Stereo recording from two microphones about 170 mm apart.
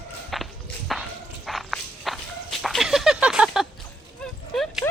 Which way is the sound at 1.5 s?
Centre (ahead or behind).